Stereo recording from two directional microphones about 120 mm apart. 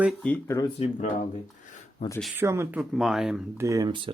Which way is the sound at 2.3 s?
20° right (ahead or behind).